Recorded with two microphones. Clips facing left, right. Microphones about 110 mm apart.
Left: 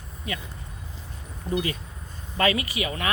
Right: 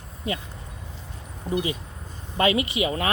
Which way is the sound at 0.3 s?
30° right (ahead or behind).